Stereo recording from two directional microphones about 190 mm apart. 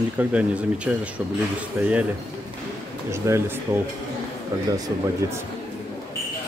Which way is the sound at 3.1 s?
15° right (ahead or behind).